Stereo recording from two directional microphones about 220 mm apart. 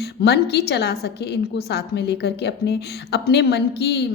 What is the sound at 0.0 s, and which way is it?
A woman's voice, 50° left (ahead or behind).